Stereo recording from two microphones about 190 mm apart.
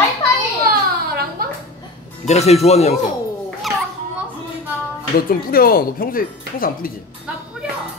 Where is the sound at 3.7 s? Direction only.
Centre (ahead or behind).